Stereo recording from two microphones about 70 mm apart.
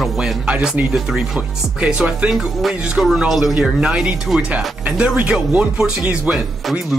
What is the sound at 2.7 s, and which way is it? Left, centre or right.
Speech, centre.